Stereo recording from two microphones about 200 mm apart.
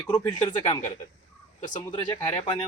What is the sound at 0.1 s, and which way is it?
Speech, 20° left (ahead or behind).